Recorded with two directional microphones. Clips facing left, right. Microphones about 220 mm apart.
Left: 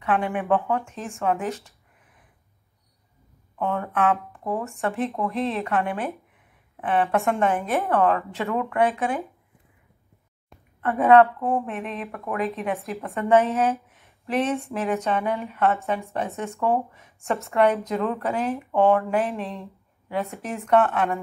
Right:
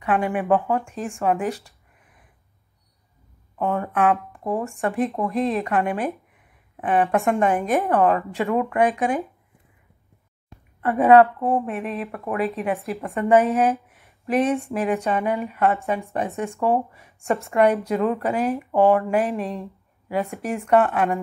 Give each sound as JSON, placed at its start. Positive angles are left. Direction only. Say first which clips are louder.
{"t": 0.0, "sound": "a woman's voice", "louder": "right 2 dB", "side_deg": -15}
{"t": 3.5, "sound": "a woman's voice", "louder": "right 2 dB", "side_deg": -15}
{"t": 10.8, "sound": "a woman's voice", "louder": "right 2 dB", "side_deg": -10}